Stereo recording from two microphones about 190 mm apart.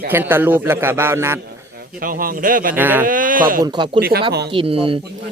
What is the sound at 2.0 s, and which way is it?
Speech, 50° right (ahead or behind).